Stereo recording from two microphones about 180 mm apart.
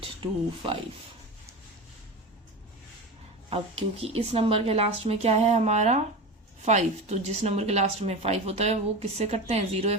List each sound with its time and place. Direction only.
0.0 s speech: 30° right (ahead or behind)
3.5 s speech: 30° right (ahead or behind)